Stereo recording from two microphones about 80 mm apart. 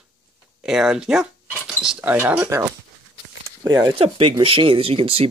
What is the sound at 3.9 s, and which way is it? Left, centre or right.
Speech, right.